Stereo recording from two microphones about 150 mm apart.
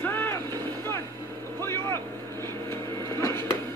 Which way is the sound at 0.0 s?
15° left (ahead or behind).